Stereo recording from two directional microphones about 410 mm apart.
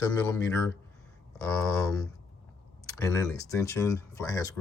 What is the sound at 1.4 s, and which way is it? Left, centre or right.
Speech, centre.